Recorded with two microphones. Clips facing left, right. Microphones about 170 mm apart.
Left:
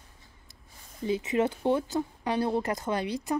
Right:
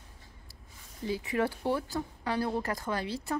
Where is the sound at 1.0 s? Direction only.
20° left (ahead or behind).